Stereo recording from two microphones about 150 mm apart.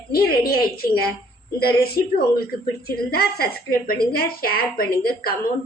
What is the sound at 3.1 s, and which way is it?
A woman's voice, 85° left.